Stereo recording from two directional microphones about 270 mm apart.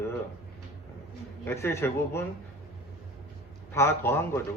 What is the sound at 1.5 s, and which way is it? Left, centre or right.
Speech, centre.